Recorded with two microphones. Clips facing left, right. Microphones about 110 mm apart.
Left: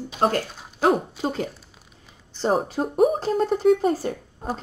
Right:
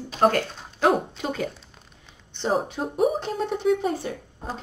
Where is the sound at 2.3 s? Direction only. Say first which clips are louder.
Left 3 dB; 35° left (ahead or behind).